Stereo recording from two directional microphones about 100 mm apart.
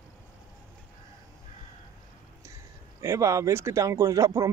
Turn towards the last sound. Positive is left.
turn(degrees=-35)  # may be behind; listen again after turning